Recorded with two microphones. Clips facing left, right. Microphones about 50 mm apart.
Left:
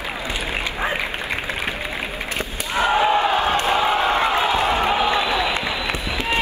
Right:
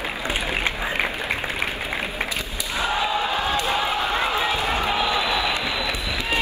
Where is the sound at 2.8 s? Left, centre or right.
Left.